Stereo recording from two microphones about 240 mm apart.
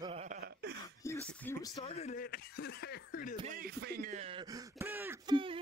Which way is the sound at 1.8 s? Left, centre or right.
Left.